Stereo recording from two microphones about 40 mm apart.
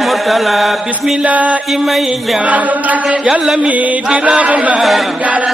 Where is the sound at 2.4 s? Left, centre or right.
Right.